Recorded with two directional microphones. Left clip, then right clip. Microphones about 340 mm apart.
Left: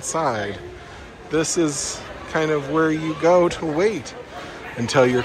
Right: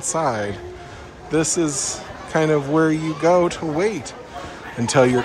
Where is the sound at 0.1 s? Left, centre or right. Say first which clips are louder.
Right 1 dB; centre.